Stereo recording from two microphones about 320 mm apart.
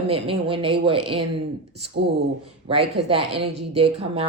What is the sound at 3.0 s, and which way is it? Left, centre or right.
Speech, right.